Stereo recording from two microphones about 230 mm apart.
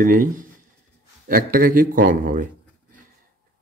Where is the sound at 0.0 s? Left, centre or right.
Right.